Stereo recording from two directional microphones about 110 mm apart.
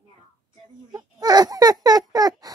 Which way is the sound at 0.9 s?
35° right (ahead or behind).